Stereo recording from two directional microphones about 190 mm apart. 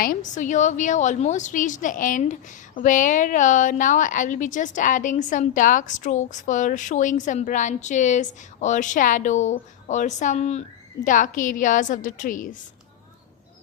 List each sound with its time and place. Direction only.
0.0 s a woman's voice: 45° left (ahead or behind)